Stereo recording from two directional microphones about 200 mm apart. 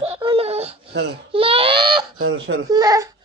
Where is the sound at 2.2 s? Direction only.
70° right (ahead or behind).